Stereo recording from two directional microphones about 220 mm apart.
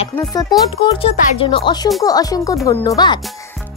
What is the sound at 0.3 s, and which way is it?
A child's voice, 15° left (ahead or behind).